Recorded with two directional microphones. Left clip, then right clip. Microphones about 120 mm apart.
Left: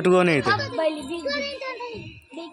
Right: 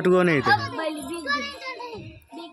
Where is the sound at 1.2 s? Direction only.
40° right (ahead or behind).